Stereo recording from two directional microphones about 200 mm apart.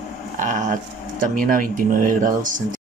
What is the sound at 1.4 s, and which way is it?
Speech, 45° right (ahead or behind).